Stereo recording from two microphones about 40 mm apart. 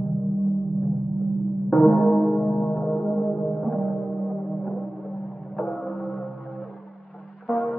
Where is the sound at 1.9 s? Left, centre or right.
Left.